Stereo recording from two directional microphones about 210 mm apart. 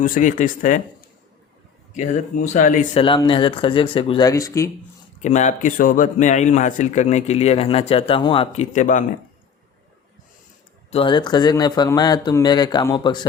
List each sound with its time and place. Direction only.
0.0 s a man's voice: 40° left (ahead or behind)
1.9 s a man's voice: 35° left (ahead or behind)
3.0 s speech: 25° left (ahead or behind)
5.2 s a man's voice: 35° left (ahead or behind)
8.7 s a man's voice: 35° left (ahead or behind)
10.9 s speech: 25° left (ahead or behind)